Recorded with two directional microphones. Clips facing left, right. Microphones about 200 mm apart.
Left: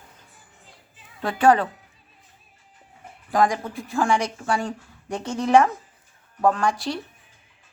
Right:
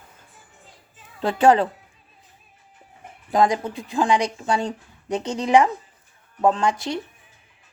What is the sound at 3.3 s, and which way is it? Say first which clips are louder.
Speech: right 2 dB; 20° right (ahead or behind).